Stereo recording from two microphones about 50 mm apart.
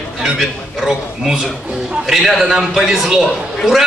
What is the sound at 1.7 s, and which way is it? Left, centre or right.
Speech, centre.